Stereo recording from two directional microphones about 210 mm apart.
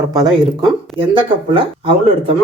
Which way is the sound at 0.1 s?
20° right (ahead or behind).